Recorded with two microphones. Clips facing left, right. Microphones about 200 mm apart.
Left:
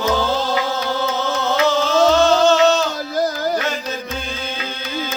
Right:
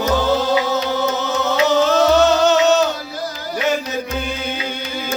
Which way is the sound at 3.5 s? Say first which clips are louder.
Right 3 dB; 15° right (ahead or behind).